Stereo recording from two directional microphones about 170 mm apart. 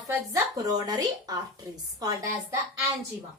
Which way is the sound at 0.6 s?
20° right (ahead or behind).